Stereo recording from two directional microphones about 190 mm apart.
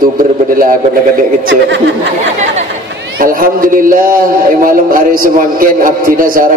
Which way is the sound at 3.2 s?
45° right (ahead or behind).